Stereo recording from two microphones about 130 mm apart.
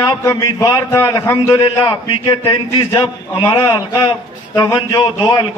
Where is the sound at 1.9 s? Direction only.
40° left (ahead or behind).